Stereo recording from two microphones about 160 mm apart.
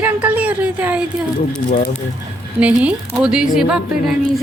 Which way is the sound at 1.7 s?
60° left (ahead or behind).